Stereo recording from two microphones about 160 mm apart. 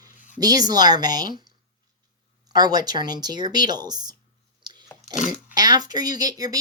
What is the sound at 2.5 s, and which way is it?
Speech, 25° right (ahead or behind).